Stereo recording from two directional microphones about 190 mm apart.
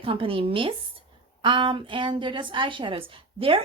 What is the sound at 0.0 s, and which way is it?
Speech, 30° right (ahead or behind).